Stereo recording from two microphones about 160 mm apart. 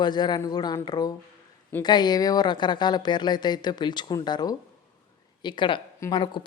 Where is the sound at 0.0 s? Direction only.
25° left (ahead or behind).